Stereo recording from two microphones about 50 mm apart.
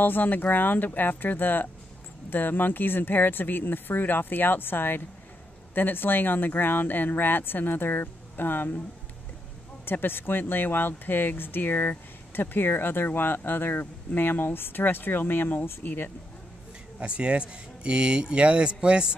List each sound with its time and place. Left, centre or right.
0.0 s speech: left
9.8 s speech: left
17.0 s speech: right